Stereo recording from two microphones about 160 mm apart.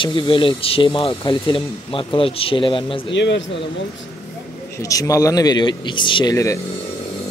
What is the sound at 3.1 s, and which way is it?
Speech, 90° left.